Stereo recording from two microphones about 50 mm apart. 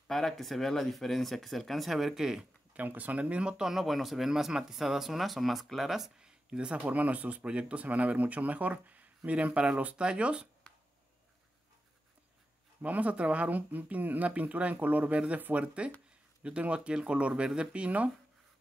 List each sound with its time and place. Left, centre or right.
0.1 s speech: centre
2.7 s speech: right
3.6 s speech: centre; by 10.5 s right
12.8 s speech: right